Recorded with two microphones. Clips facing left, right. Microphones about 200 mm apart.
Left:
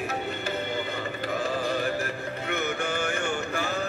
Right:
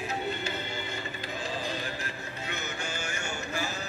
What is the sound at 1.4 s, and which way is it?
Mantra, 60° left (ahead or behind).